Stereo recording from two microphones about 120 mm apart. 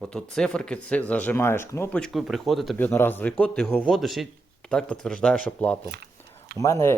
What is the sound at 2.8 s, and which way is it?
Speech, 15° left (ahead or behind).